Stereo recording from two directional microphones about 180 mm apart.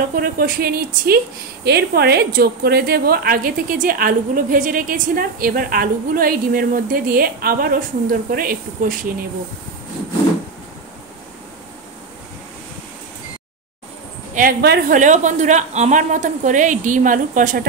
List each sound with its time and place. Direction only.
0.2 s speech: 55° right (ahead or behind)
14.3 s speech: 55° right (ahead or behind)
15.0 s speech: 45° right (ahead or behind)